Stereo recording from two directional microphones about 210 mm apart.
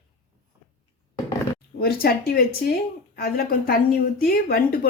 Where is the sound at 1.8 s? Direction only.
45° left (ahead or behind).